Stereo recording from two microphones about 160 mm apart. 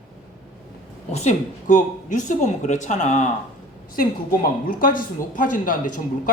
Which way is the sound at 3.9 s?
60° left (ahead or behind).